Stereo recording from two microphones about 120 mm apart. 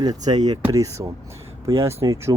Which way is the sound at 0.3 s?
70° right (ahead or behind).